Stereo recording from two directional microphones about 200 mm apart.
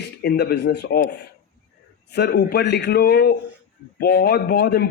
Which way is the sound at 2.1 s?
55° left (ahead or behind).